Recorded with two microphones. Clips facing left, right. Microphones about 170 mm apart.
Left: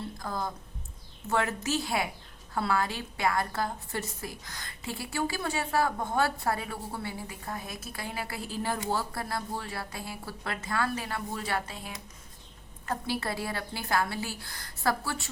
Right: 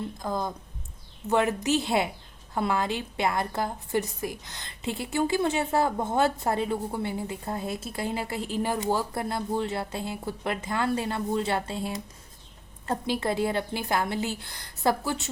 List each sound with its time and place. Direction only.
0.2 s a woman's voice: 20° right (ahead or behind)
13.1 s a woman's voice: 20° right (ahead or behind)